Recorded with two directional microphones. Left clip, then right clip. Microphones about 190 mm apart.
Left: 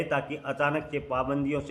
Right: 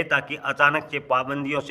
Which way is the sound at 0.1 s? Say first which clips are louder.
Right 6 dB; 45° right (ahead or behind).